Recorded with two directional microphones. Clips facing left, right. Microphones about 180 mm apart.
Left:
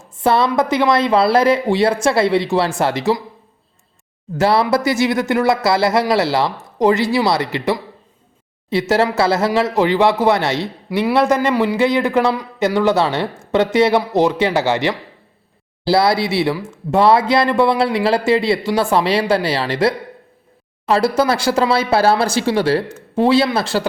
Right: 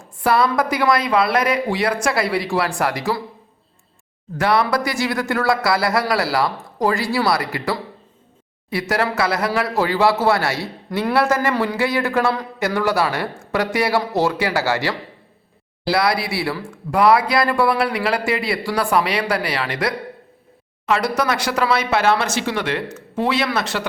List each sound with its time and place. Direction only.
0.0 s speech: 25° left (ahead or behind)
4.4 s speech: 25° left (ahead or behind)
10.8 s speech: 10° left (ahead or behind)
11.1 s a man's voice: 20° left (ahead or behind)